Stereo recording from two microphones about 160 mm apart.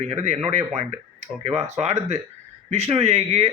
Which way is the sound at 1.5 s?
45° right (ahead or behind).